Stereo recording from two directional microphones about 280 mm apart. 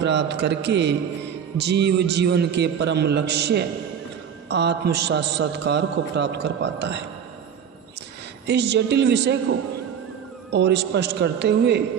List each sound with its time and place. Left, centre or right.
0.0 s a man's voice: right
8.4 s a man's voice: right